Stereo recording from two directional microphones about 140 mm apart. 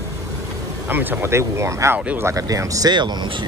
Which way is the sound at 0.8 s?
15° right (ahead or behind).